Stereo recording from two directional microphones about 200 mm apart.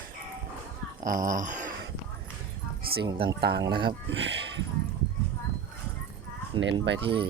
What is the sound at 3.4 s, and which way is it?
Speech, 55° right (ahead or behind).